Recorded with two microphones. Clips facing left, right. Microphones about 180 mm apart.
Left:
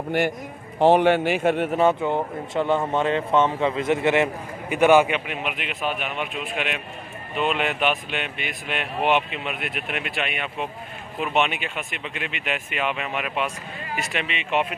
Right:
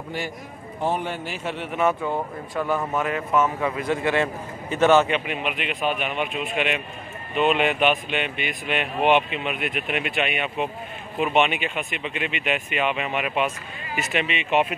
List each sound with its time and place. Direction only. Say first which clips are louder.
0.7 s a man's voice: left 10 dB; 85° left; by 1.8 s 50° left (ahead or behind)
1.8 s speech: left 3 dB; 25° left (ahead or behind)
5.2 s speech: right 2 dB; centre (ahead or behind)